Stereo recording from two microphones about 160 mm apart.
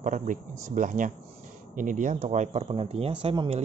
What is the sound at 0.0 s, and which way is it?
Speech, 50° right (ahead or behind).